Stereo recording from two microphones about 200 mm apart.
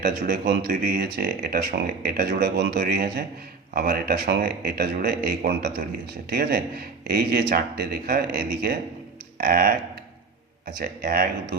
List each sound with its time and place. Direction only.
0.0 s speech: 45° right (ahead or behind)